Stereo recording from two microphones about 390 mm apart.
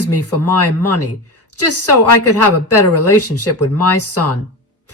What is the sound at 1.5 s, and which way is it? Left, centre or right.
Speech, left.